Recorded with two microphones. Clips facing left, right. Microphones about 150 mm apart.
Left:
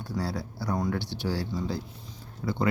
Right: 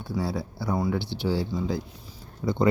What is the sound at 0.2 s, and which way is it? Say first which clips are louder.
Speech: right 3 dB; 15° right (ahead or behind).